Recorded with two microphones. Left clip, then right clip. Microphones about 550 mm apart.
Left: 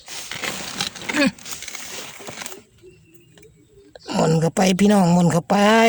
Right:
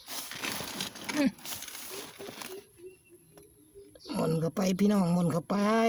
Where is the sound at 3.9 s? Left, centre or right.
Right.